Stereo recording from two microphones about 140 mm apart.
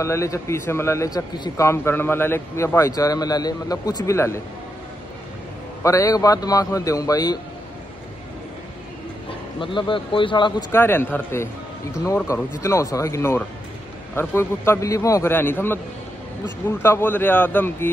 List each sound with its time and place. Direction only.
0.0 s a man's voice: 20° left (ahead or behind)
1.7 s a man's voice: 15° left (ahead or behind)
5.8 s a man's voice: 20° left (ahead or behind)
9.6 s speech: 35° left (ahead or behind)
10.7 s a man's voice: 15° left (ahead or behind)